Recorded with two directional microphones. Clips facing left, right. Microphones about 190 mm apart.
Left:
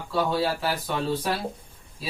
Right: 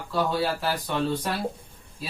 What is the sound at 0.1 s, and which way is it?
Speech, centre (ahead or behind).